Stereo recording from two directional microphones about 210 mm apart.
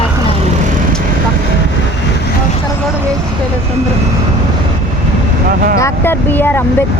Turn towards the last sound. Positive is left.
turn(degrees=10)  # may be behind; listen again after turning